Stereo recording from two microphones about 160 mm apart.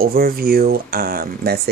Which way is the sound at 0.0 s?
70° right (ahead or behind).